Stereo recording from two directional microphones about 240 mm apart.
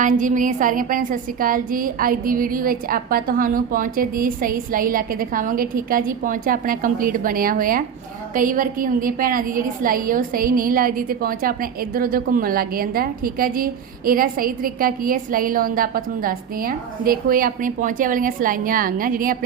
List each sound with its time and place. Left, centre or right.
0.0 s a woman's voice: right